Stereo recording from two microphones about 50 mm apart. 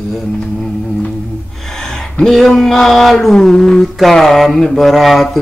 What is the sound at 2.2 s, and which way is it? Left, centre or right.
Speech, centre.